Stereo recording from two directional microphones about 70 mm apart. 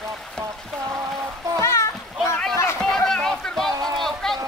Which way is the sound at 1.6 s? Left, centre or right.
Left.